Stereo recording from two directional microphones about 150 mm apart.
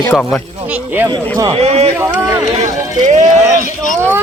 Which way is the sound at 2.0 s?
15° right (ahead or behind).